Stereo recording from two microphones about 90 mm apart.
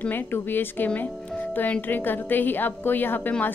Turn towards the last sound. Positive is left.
turn(degrees=20)  # may be behind; listen again after turning